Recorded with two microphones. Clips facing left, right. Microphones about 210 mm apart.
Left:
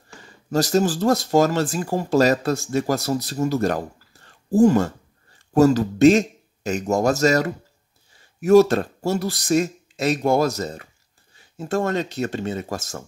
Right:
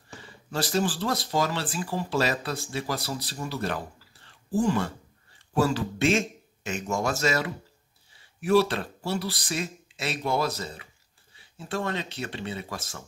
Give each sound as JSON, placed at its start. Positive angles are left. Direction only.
{"t": 0.2, "sound": "speech", "side_deg": 40}